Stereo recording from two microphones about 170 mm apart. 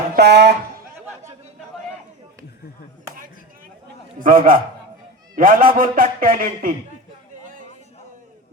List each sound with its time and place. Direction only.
0.2 s speech: 80° right
4.2 s a man's voice: 55° right (ahead or behind)